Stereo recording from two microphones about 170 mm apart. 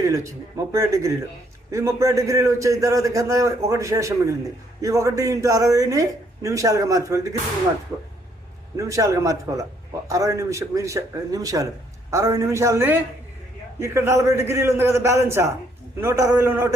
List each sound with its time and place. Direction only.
0.0 s a man's voice: 20° right (ahead or behind)
8.7 s a man's voice: 20° right (ahead or behind)